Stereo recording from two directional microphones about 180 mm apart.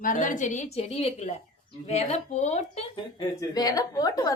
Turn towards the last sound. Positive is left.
turn(degrees=20)  # may be behind; listen again after turning